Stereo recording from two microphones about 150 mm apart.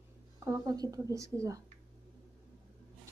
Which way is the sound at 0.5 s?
25° right (ahead or behind).